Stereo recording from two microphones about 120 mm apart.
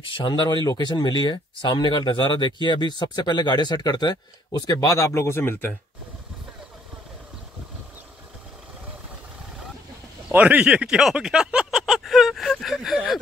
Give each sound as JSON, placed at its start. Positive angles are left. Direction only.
{"t": 0.0, "sound": "speech", "side_deg": 45}
{"t": 10.2, "sound": "speech", "side_deg": -10}